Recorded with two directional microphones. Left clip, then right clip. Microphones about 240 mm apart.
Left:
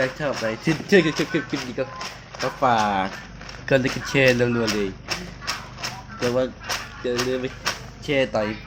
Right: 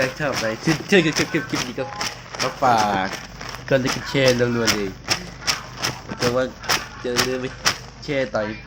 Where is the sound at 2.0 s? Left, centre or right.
Right.